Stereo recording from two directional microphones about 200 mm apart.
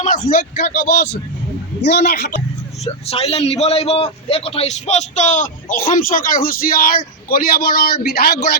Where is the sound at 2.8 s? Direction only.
30° left (ahead or behind); by 8.4 s 50° left (ahead or behind).